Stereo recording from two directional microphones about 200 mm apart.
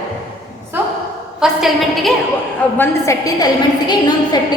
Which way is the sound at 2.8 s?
15° left (ahead or behind).